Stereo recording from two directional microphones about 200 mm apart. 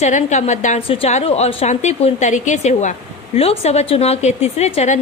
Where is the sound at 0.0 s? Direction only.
35° left (ahead or behind).